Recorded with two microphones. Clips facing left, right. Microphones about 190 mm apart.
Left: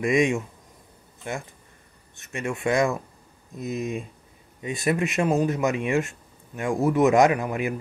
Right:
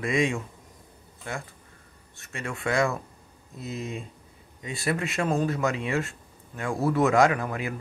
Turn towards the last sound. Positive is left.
turn(degrees=20)  # may be behind; listen again after turning